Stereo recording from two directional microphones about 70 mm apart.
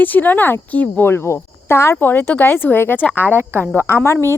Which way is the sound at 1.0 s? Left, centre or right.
Left.